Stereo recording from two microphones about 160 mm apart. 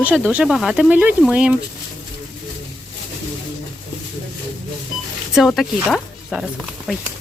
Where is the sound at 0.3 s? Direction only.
5° right (ahead or behind).